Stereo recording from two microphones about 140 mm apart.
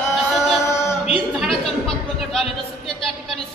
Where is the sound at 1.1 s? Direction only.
Centre (ahead or behind).